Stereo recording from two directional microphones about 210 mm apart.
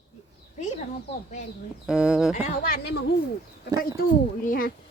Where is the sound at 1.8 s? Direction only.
5° right (ahead or behind).